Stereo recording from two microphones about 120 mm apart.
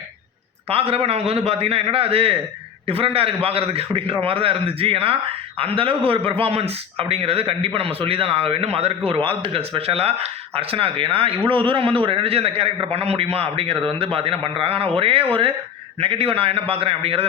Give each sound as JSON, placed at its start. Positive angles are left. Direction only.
{"t": 0.7, "sound": "a man's voice", "side_deg": -55}